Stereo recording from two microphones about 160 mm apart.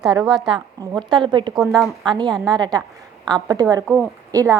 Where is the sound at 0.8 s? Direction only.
25° right (ahead or behind).